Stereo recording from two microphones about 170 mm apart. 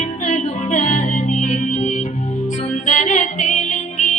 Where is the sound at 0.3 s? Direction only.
45° left (ahead or behind).